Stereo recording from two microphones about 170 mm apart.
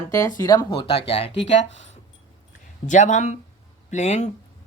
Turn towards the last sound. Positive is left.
turn(degrees=40)  # may be behind; listen again after turning